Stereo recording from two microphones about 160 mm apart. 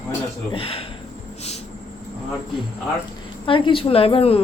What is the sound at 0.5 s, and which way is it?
Speech, 35° left (ahead or behind).